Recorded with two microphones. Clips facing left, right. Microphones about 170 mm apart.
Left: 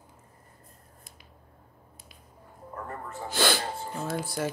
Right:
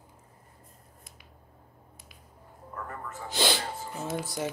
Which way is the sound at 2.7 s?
30° left (ahead or behind).